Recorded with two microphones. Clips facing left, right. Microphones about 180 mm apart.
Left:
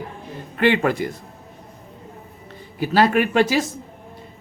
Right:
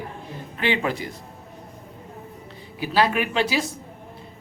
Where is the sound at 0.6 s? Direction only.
55° left (ahead or behind).